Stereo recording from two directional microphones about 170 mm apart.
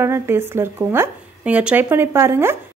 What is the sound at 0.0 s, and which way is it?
Speech, 15° right (ahead or behind).